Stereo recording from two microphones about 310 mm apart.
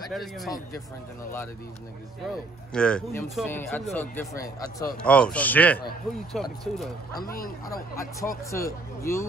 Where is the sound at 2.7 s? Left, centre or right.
Centre.